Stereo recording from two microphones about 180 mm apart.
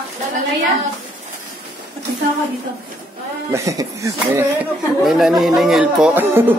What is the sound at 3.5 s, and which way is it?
Speech, 15° right (ahead or behind).